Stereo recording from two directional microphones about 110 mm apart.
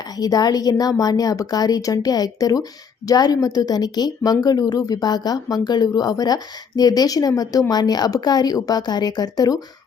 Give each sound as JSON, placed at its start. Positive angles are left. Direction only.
{"t": 0.2, "sound": "speech", "side_deg": 35}